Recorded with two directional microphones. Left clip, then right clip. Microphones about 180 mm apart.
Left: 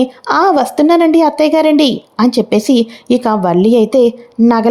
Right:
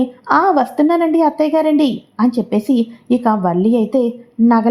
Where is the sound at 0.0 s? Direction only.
30° left (ahead or behind).